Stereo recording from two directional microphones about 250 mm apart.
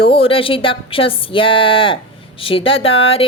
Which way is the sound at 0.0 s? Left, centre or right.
Left.